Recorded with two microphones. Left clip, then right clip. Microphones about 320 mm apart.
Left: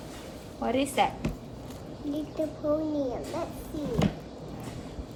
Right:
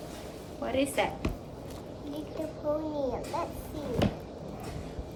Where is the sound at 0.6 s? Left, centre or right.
Centre.